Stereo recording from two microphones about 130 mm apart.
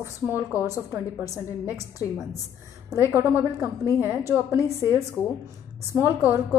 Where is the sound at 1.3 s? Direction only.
25° left (ahead or behind).